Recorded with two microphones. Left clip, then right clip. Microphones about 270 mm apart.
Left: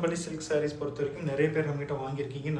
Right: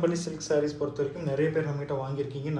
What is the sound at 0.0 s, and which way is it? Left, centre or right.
Speech, centre.